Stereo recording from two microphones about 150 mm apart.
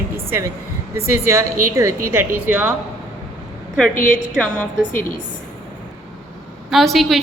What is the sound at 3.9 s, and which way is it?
Speech, 60° left (ahead or behind).